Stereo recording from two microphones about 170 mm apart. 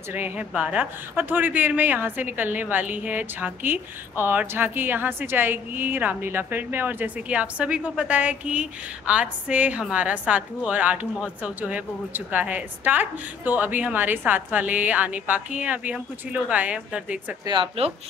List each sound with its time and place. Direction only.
0.1 s a woman's voice: 10° right (ahead or behind)
17.5 s speech: 35° right (ahead or behind)